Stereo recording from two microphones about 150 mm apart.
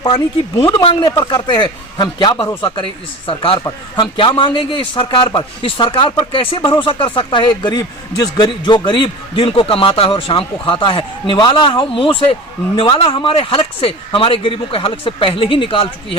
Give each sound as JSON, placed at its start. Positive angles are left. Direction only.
{"t": 0.6, "sound": "speech", "side_deg": 35}